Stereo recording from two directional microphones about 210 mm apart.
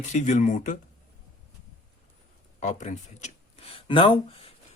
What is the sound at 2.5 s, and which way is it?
Speech, 35° left (ahead or behind).